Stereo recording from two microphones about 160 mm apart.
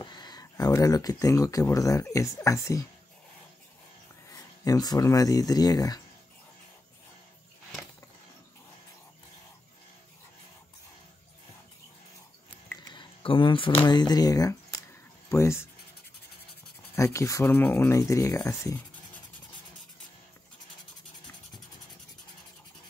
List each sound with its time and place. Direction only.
0.0 s speech: 25° left (ahead or behind)
4.3 s speech: 25° left (ahead or behind)
12.8 s speech: 30° left (ahead or behind)
16.9 s speech: 15° left (ahead or behind)